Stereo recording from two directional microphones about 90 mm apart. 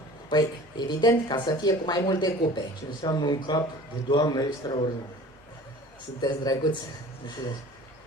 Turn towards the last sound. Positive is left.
turn(degrees=50)  # may be behind; listen again after turning